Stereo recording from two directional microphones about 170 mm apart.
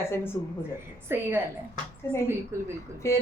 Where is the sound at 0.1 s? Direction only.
15° left (ahead or behind).